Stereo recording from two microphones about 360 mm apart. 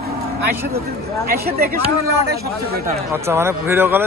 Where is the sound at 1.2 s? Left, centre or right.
Right.